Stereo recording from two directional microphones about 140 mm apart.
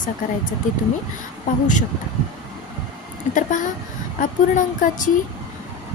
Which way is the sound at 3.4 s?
65° left (ahead or behind).